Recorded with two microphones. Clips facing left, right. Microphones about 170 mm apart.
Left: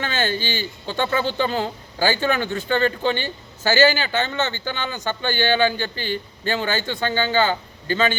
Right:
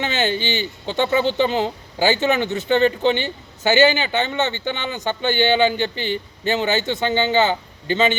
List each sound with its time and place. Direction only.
0.0 s speech: 20° right (ahead or behind)